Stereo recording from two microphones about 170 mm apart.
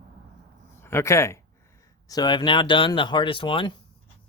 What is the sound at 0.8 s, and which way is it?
Speech, 15° left (ahead or behind).